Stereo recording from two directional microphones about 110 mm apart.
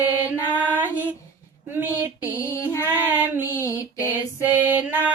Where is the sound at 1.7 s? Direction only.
20° right (ahead or behind).